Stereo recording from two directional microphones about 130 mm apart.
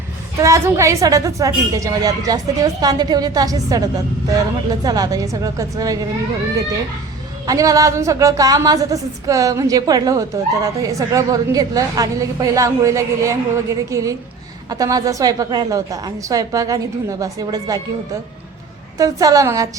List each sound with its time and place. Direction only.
0.3 s a woman's voice: 25° right (ahead or behind)
7.4 s a woman's voice: 25° right (ahead or behind)